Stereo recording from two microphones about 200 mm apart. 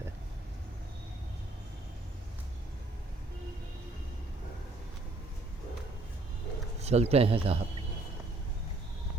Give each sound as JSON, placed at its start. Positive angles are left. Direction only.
{"t": 6.8, "sound": "speech", "side_deg": -30}